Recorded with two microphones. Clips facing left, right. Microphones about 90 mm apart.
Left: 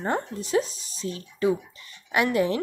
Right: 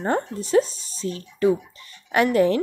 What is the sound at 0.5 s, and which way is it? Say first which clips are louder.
Speech: right 6 dB; 35° right (ahead or behind).